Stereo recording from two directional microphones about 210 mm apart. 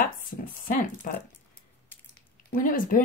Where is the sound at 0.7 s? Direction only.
40° left (ahead or behind).